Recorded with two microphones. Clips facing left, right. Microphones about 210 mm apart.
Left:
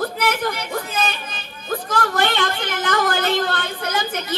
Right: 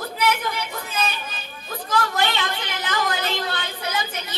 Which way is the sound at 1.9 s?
50° left (ahead or behind).